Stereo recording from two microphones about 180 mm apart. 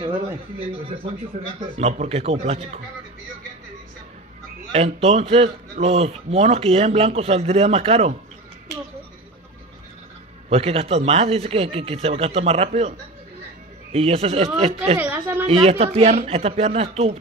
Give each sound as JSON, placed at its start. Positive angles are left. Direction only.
{"t": 1.3, "sound": "a man's voice", "side_deg": -40}
{"t": 4.7, "sound": "a man's voice", "side_deg": -35}
{"t": 10.5, "sound": "a man's voice", "side_deg": -35}
{"t": 13.9, "sound": "a man's voice", "side_deg": -30}
{"t": 15.0, "sound": "a sound", "side_deg": -10}
{"t": 15.4, "sound": "a man's voice", "side_deg": -35}